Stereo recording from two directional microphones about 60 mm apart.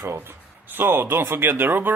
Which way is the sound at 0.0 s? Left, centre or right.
Right.